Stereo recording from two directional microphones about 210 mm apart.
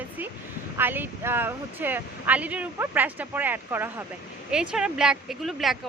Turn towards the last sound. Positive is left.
turn(degrees=0)  # may be behind; listen again after turning